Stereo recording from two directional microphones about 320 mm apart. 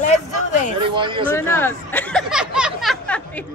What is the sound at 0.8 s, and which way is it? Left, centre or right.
Speech, centre.